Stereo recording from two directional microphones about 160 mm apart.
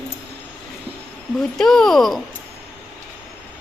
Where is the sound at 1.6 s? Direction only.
Centre (ahead or behind).